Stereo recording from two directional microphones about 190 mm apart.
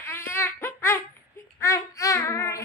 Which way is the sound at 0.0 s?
10° left (ahead or behind).